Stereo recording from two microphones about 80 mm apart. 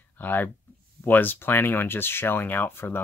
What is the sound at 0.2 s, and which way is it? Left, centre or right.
Speech, left.